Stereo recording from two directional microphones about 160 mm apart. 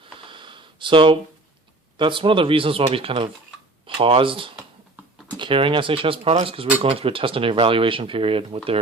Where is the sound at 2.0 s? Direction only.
30° right (ahead or behind).